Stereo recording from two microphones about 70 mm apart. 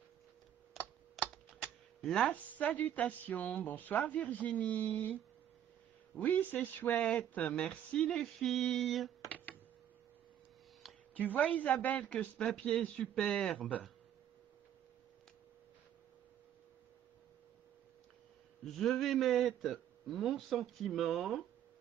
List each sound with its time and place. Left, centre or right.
1.2 s typing: centre
2.0 s a sound: centre
2.2 s a woman's voice: left; by 9.1 s centre
11.1 s a woman's voice: left
18.7 s a man's voice: centre